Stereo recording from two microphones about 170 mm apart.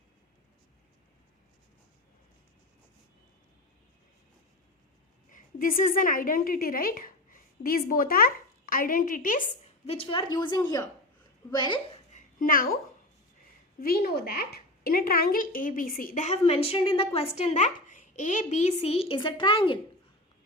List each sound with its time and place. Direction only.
5.3 s a woman's voice: 55° left (ahead or behind)
9.8 s a woman's voice: 35° left (ahead or behind)
12.1 s a sound: 55° left (ahead or behind)
13.7 s a woman's voice: 60° left (ahead or behind); by 19.8 s 30° left (ahead or behind)